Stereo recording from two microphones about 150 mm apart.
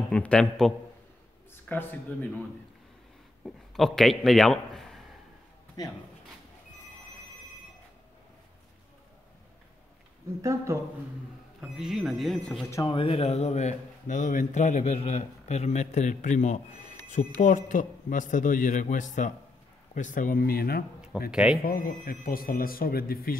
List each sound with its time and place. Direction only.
0.1 s speech: 5° left (ahead or behind)
3.4 s a man's voice: centre (ahead or behind)
10.4 s speech: 20° right (ahead or behind)
11.7 s speech: centre (ahead or behind)
12.8 s a man's voice: 35° left (ahead or behind); by 20.8 s 90° left
21.3 s speech: 5° right (ahead or behind)
21.6 s speech: 75° left (ahead or behind)